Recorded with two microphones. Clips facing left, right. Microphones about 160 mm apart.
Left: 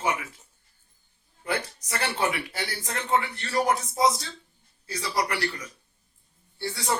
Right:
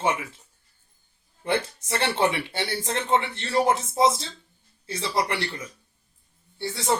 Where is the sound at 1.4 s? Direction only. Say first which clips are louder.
Right 4 dB; 25° right (ahead or behind).